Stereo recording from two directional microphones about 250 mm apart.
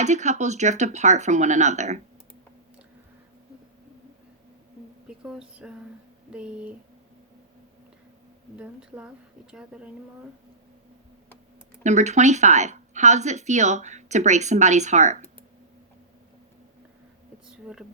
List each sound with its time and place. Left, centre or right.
0.0 s speech: right
5.0 s a woman's voice: centre
8.5 s a woman's voice: centre
11.8 s speech: right